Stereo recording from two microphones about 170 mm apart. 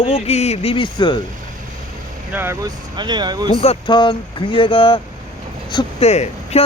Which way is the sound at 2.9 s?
25° right (ahead or behind).